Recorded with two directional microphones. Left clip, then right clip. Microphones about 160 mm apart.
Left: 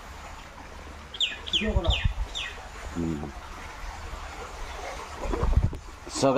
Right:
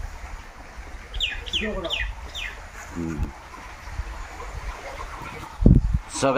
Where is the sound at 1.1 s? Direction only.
75° right (ahead or behind).